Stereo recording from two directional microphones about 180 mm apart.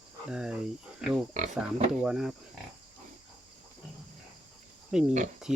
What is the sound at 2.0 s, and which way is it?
Speech, 5° right (ahead or behind).